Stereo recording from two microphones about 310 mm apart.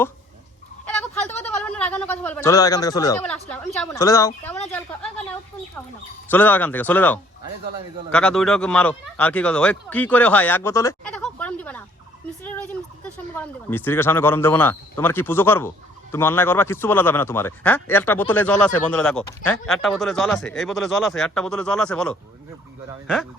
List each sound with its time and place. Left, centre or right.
0.9 s a sound: centre
3.8 s speech: centre
6.3 s speech: centre